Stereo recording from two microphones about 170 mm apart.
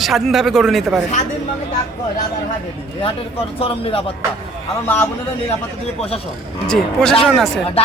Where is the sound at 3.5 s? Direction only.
35° left (ahead or behind).